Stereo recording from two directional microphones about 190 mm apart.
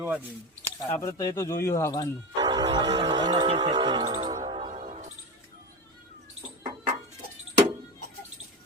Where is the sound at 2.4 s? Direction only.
20° right (ahead or behind); by 5.0 s 40° right (ahead or behind).